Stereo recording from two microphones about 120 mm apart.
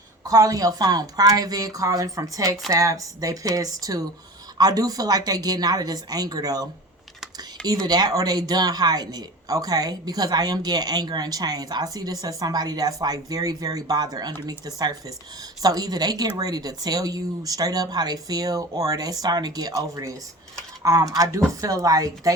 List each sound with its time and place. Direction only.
0.3 s speech: 30° right (ahead or behind)
7.9 s speech: 35° right (ahead or behind)